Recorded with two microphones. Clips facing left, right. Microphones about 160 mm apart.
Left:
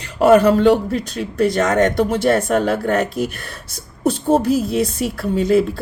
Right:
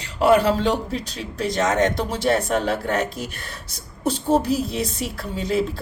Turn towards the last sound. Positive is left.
turn(degrees=50)  # may be behind; listen again after turning